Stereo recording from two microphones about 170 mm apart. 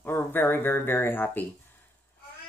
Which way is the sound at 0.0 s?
10° left (ahead or behind).